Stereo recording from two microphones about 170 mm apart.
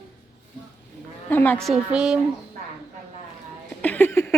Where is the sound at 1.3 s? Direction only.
10° left (ahead or behind).